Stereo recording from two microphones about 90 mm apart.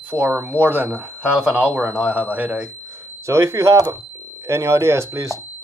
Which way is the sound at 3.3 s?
35° right (ahead or behind).